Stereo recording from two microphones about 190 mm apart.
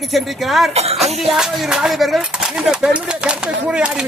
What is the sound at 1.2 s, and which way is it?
Speech, centre (ahead or behind).